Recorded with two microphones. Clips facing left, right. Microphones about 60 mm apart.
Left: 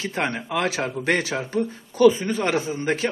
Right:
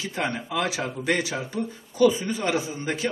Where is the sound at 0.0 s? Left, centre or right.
Left.